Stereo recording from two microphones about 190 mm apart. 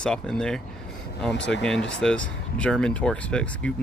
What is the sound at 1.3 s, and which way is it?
Speech, 65° left (ahead or behind).